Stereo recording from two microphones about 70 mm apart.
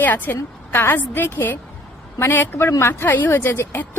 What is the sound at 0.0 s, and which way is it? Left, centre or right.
A woman's voice, left.